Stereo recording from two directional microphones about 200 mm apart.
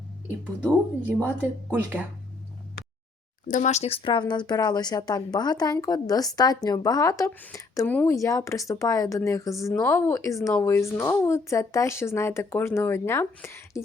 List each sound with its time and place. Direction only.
1.0 s a woman's voice: 10° right (ahead or behind)
3.4 s speech: 40° left (ahead or behind); by 13.8 s 10° left (ahead or behind)